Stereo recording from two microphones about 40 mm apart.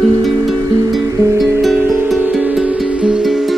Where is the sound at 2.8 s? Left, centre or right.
Right.